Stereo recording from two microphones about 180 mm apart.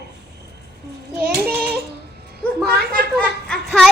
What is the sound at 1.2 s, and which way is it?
Child singing, 60° right (ahead or behind).